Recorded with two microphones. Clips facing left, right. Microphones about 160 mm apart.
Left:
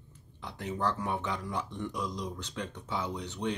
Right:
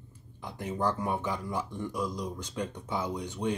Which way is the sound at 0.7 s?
10° right (ahead or behind).